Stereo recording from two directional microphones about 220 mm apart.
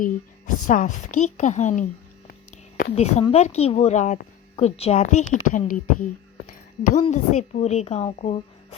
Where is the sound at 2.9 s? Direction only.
30° left (ahead or behind).